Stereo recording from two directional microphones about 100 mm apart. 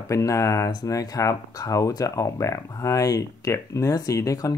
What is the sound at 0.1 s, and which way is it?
Speech, 30° left (ahead or behind).